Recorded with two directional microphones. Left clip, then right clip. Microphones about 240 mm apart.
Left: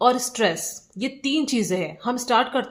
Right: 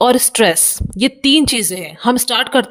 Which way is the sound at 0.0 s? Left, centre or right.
Right.